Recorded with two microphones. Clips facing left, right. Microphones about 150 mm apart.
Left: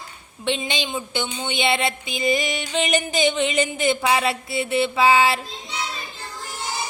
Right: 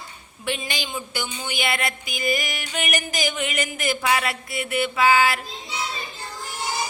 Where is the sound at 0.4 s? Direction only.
25° left (ahead or behind).